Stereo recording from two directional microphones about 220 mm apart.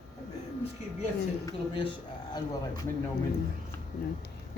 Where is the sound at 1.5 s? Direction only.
25° left (ahead or behind).